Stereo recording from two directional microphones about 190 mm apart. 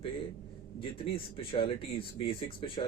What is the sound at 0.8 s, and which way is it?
Speech, 30° left (ahead or behind).